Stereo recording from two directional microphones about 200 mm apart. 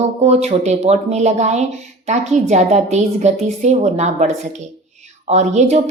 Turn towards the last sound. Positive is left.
turn(degrees=-35)  # may be behind; listen again after turning